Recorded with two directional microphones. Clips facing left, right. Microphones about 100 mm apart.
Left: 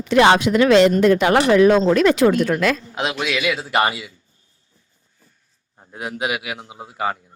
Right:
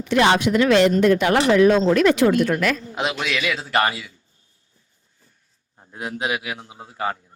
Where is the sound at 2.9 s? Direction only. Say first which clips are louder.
Left 1 dB; centre (ahead or behind).